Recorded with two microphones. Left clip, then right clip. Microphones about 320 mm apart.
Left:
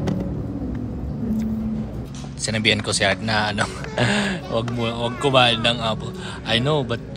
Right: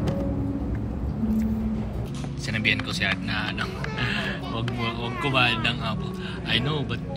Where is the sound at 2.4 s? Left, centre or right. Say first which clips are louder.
Left 5 dB; centre.